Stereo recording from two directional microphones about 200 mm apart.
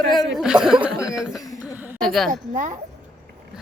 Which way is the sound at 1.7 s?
10° right (ahead or behind).